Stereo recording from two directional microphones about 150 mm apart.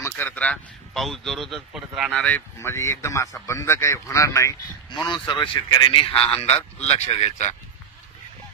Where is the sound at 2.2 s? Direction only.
10° left (ahead or behind).